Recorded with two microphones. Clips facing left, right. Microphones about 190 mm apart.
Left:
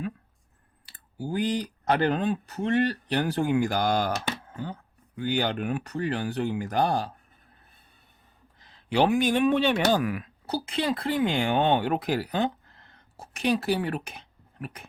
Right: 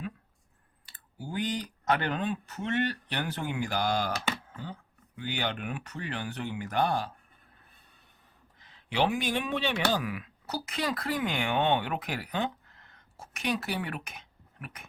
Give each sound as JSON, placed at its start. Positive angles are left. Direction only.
{"t": 0.9, "sound": "speech", "side_deg": 40}
{"t": 8.6, "sound": "speech", "side_deg": 40}
{"t": 10.4, "sound": "speech", "side_deg": 30}